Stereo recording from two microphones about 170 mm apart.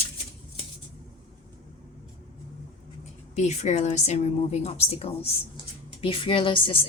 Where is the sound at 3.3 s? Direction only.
45° left (ahead or behind).